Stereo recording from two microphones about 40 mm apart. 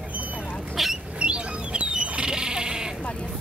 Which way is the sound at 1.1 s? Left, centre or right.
Right.